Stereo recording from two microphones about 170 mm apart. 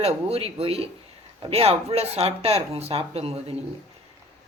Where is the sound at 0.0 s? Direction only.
35° right (ahead or behind).